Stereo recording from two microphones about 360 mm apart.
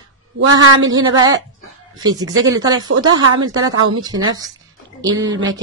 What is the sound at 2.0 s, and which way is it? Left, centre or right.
Speech, centre.